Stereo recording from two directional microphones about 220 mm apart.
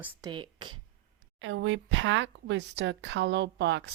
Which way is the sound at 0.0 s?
20° right (ahead or behind).